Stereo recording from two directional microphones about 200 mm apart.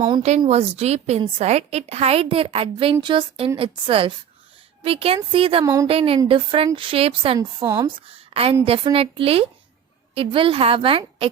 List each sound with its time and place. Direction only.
0.2 s a woman's voice: 35° right (ahead or behind)
5.6 s speech: 15° right (ahead or behind)
5.9 s speech: 30° right (ahead or behind)
8.0 s a woman's voice: 30° right (ahead or behind)